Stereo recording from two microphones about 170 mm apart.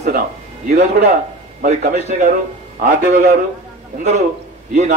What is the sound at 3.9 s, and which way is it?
Speech, 40° right (ahead or behind).